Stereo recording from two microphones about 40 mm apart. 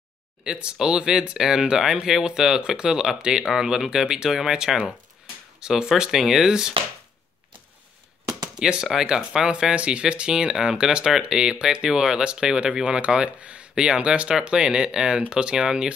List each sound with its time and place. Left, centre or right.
0.4 s speech: right
6.1 s speech: centre
8.5 s speech: centre
9.8 s speech: right